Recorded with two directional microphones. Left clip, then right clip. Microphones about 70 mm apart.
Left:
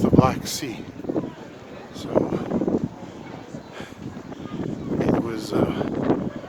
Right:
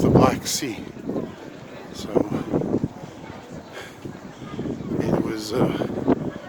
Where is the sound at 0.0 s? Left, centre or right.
Right.